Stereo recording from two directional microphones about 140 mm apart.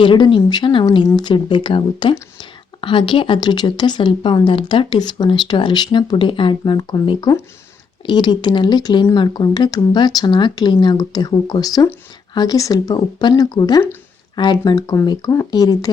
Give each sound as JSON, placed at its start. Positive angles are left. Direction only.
{"t": 0.0, "sound": "speech", "side_deg": 35}